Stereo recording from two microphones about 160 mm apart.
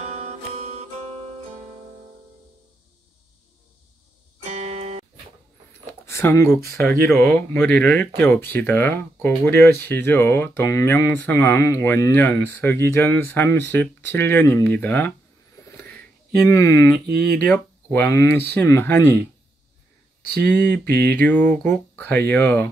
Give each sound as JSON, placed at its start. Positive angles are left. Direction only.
{"t": 0.0, "sound": "music", "side_deg": -45}
{"t": 4.4, "sound": "music", "side_deg": -45}
{"t": 6.0, "sound": "speech", "side_deg": 20}
{"t": 7.1, "sound": "speech", "side_deg": 5}
{"t": 15.7, "sound": "a sound", "side_deg": 10}
{"t": 16.4, "sound": "speech", "side_deg": 20}
{"t": 20.2, "sound": "a sound", "side_deg": -75}
{"t": 21.2, "sound": "speech", "side_deg": 10}